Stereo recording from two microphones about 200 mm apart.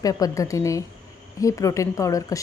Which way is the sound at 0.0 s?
15° left (ahead or behind).